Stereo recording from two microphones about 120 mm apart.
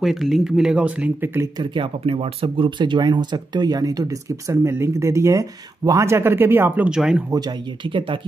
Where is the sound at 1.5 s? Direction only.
40° right (ahead or behind); by 6.9 s 20° right (ahead or behind).